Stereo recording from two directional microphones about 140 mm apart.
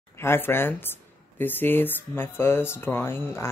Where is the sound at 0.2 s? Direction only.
15° left (ahead or behind).